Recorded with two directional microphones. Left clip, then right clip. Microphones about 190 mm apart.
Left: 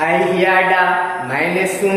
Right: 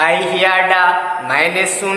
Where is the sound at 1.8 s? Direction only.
15° right (ahead or behind).